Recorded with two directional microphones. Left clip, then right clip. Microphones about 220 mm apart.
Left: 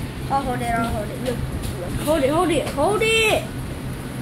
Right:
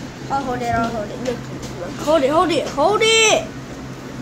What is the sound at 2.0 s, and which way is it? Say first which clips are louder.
Speech: right 4 dB; 15° right (ahead or behind).